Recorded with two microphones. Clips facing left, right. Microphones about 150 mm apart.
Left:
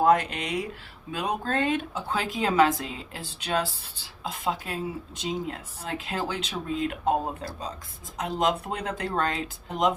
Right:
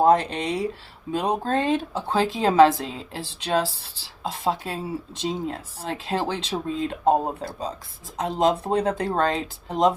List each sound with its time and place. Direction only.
0.0 s speech: 30° right (ahead or behind)